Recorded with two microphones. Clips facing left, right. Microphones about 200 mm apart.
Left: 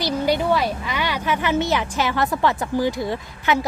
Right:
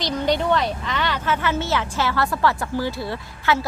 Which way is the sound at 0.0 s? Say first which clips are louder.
Left 1 dB; 10° left (ahead or behind).